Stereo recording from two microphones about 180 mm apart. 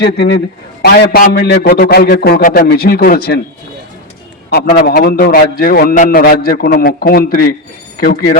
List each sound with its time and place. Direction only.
0.0 s a man's voice: 65° left (ahead or behind)
4.4 s a man's voice: 55° left (ahead or behind)